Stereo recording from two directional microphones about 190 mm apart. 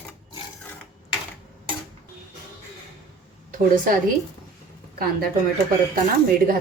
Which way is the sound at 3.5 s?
45° right (ahead or behind).